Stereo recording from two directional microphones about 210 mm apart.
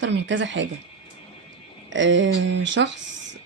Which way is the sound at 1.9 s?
60° right (ahead or behind).